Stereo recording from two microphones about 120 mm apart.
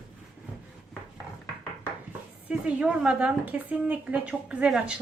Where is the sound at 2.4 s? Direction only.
10° right (ahead or behind).